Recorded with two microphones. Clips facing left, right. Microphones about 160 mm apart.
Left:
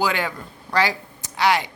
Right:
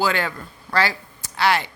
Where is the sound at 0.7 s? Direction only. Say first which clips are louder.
Left 1 dB; 15° left (ahead or behind).